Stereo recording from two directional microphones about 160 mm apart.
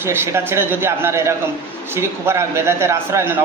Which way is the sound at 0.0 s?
15° right (ahead or behind).